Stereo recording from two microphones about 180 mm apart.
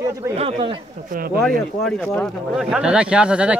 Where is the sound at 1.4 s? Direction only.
5° left (ahead or behind).